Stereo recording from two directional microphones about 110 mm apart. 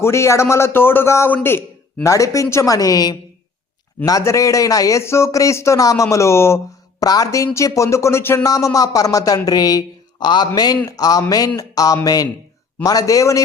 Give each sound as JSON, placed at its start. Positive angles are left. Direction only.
{"t": 0.0, "sound": "a man's voice", "side_deg": 25}